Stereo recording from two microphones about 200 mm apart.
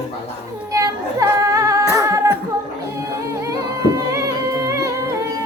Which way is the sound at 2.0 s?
15° right (ahead or behind).